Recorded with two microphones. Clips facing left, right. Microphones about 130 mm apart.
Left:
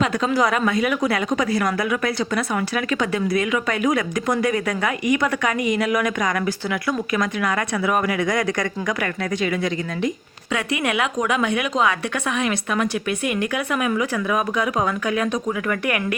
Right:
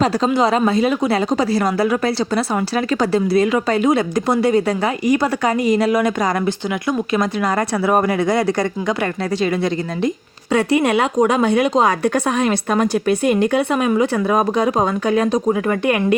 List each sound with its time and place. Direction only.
0.0 s a woman's voice: 35° right (ahead or behind)